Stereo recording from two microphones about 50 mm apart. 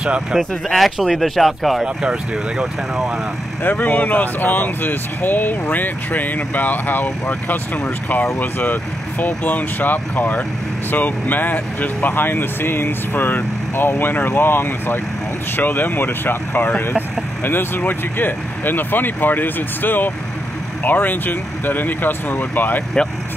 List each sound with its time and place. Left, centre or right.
0.0 s speech: centre
0.7 s speech: centre
3.6 s speech: left